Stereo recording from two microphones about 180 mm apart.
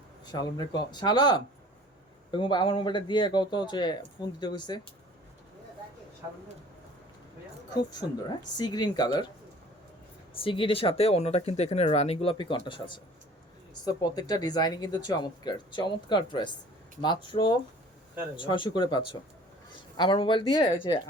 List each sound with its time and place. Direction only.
0.3 s speech: 25° left (ahead or behind)
8.5 s speech: 25° left (ahead or behind)
10.3 s speech: 30° left (ahead or behind)